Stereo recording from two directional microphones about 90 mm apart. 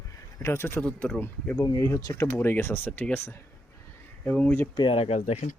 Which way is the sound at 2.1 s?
25° left (ahead or behind).